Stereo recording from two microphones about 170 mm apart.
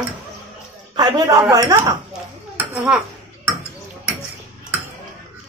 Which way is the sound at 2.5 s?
5° right (ahead or behind).